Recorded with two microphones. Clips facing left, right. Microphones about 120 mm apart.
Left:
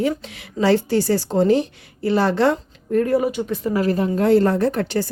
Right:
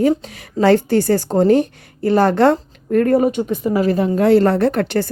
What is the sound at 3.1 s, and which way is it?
Speech, 50° right (ahead or behind).